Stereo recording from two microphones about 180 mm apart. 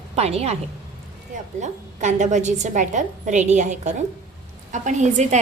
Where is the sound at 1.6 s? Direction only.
40° right (ahead or behind).